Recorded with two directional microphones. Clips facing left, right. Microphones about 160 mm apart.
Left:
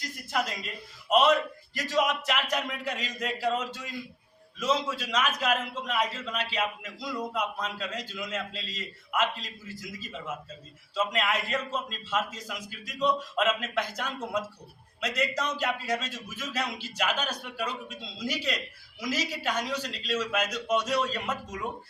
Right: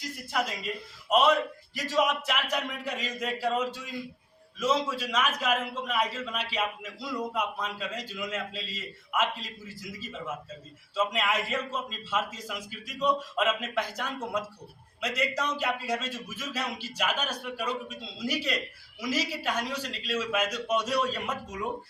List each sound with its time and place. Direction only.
0.3 s a man's voice: 5° right (ahead or behind)
10.9 s a man's voice: 5° right (ahead or behind)